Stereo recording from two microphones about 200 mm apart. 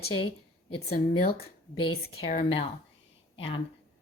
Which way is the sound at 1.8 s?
90° left.